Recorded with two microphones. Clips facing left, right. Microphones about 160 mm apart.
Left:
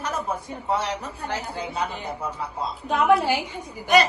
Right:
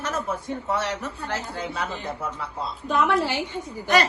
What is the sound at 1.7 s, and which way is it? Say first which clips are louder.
Speech: left 4 dB; 35° left (ahead or behind).